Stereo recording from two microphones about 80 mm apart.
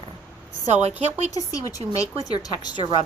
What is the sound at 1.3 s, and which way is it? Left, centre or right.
Speech, left.